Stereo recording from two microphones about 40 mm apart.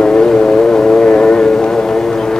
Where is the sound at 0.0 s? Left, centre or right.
Centre.